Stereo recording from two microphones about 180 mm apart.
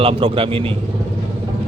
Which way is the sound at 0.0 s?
30° right (ahead or behind).